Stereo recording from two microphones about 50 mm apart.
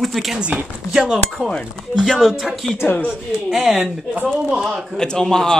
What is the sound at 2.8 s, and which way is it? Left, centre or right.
Speech, left.